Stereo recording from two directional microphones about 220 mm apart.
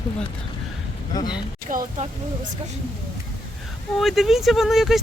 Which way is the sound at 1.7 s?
35° right (ahead or behind).